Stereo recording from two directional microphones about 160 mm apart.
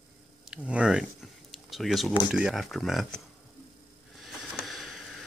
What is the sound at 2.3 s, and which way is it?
Speech, centre (ahead or behind).